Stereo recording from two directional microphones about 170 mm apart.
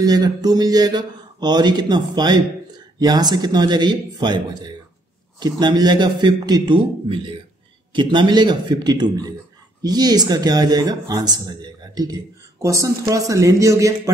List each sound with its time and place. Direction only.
0.0 s speech: 20° right (ahead or behind)